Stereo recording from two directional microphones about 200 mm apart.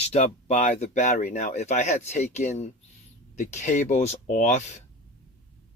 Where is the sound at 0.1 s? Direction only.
35° left (ahead or behind).